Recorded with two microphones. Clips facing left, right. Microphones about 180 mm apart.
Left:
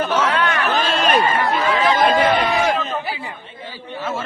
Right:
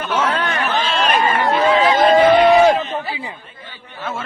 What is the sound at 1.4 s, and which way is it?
Chatter, 25° right (ahead or behind).